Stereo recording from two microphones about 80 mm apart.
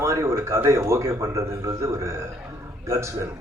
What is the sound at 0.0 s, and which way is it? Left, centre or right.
A man's voice, right.